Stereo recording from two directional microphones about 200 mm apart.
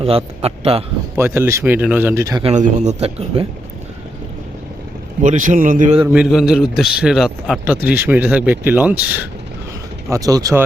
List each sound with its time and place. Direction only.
0.0 s a man's voice: 30° right (ahead or behind)
1.1 s speech: 10° right (ahead or behind)
2.4 s speech: 35° right (ahead or behind)
5.2 s speech: 40° right (ahead or behind)
6.1 s a man's voice: centre (ahead or behind); by 10.6 s 15° right (ahead or behind)